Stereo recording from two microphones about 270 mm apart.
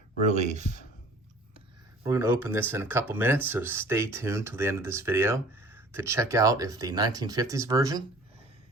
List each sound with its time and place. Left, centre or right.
0.3 s speech: right
2.0 s speech: centre